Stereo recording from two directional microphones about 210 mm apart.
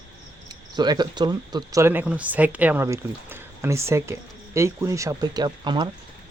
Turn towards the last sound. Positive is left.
turn(degrees=-20)  # may be behind; listen again after turning